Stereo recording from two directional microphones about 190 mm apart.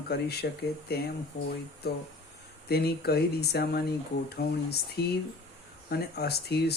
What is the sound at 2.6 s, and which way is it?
Speech, 55° left (ahead or behind).